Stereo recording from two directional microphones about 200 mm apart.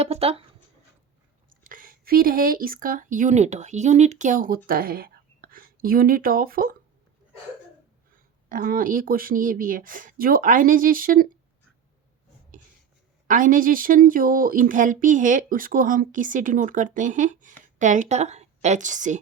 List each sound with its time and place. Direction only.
0.0 s speech: 30° right (ahead or behind)
1.6 s speech: 45° right (ahead or behind)
8.4 s speech: 45° right (ahead or behind)
13.2 s speech: 40° right (ahead or behind)